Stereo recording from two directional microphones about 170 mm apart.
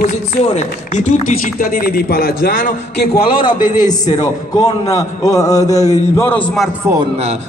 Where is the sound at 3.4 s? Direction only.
25° left (ahead or behind).